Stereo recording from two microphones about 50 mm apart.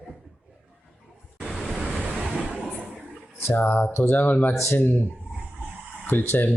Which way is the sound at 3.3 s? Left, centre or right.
Left.